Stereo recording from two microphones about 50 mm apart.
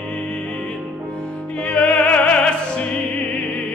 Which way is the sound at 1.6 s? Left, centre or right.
Left.